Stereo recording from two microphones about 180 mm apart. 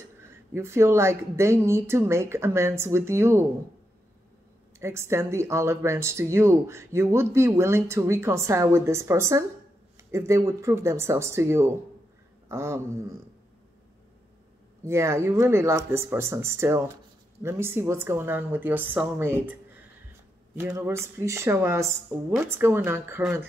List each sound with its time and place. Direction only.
0.5 s speech: 15° right (ahead or behind)
4.7 s speech: 15° right (ahead or behind)
12.4 s a sound: 15° right (ahead or behind)
14.9 s speech: 15° right (ahead or behind)
20.5 s speech: 15° right (ahead or behind)